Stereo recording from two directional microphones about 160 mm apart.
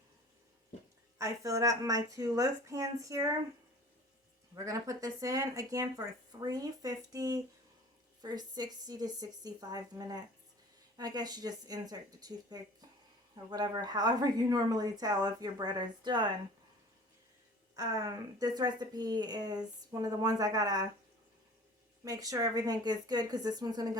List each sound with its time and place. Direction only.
1.2 s a woman's voice: 20° right (ahead or behind)
4.5 s a woman's voice: 20° right (ahead or behind)
17.7 s a woman's voice: 25° right (ahead or behind)
22.0 s a woman's voice: 20° right (ahead or behind)